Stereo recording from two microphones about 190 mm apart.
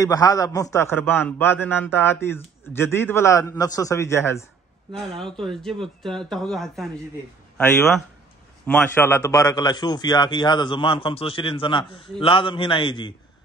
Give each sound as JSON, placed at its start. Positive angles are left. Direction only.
{"t": 0.0, "sound": "a man's voice", "side_deg": 20}
{"t": 4.9, "sound": "speech", "side_deg": 0}
{"t": 8.6, "sound": "a man's voice", "side_deg": 10}